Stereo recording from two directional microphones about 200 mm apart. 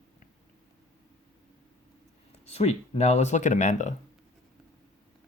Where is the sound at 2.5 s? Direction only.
30° left (ahead or behind).